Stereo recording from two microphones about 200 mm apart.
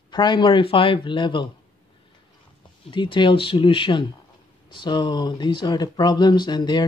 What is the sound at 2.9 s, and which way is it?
Speech, 25° left (ahead or behind).